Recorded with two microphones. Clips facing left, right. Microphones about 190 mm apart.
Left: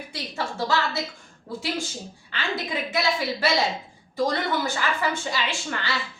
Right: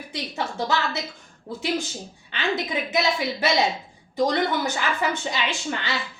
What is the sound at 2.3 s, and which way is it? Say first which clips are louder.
A woman's voice: right 3 dB; 20° right (ahead or behind).